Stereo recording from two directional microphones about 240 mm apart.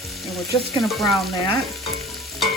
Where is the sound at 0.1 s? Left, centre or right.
Centre.